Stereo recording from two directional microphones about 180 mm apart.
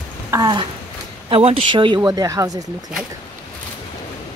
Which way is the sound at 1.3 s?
35° right (ahead or behind).